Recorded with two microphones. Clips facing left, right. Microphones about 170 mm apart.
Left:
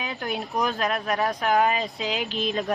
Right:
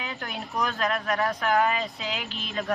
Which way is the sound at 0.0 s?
15° left (ahead or behind).